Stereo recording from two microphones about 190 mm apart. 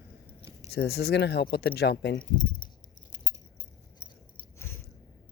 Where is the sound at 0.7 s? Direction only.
60° left (ahead or behind).